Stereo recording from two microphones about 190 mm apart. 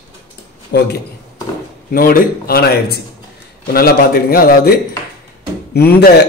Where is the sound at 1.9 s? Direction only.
50° left (ahead or behind).